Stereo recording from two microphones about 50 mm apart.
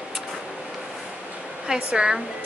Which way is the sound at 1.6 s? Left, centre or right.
Centre.